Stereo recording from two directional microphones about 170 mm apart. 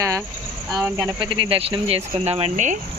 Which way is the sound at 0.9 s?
20° right (ahead or behind).